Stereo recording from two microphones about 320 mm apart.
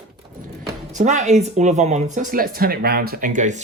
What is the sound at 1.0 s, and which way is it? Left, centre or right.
Speech, right.